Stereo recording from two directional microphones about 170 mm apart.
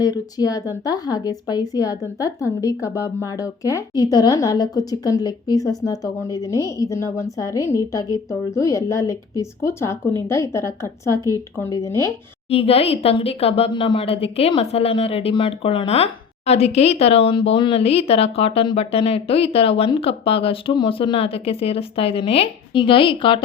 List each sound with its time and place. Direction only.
0.0 s a woman's voice: 20° left (ahead or behind)
12.5 s speech: 35° left (ahead or behind)